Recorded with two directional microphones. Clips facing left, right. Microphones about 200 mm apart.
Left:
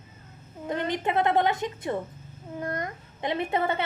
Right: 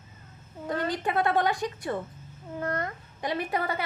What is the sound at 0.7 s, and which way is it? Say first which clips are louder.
A woman's voice: left 1 dB; 20° left (ahead or behind).